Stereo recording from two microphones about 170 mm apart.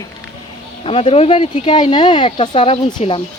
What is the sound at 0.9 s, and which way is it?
Speech, 35° left (ahead or behind).